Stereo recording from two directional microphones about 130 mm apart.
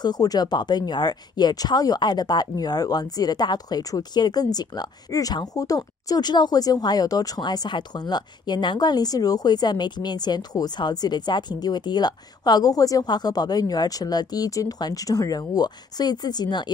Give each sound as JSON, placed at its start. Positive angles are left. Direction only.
{"t": 0.0, "sound": "speech", "side_deg": 30}